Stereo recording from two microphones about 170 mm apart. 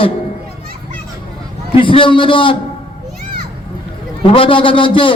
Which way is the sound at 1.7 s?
30° left (ahead or behind).